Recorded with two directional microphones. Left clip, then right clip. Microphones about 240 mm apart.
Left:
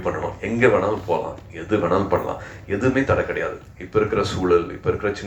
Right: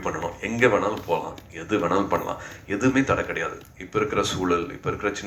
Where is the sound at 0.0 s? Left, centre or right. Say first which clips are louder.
Left 3 dB; right.